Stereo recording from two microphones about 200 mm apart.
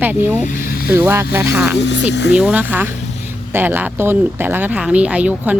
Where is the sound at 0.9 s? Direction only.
10° right (ahead or behind).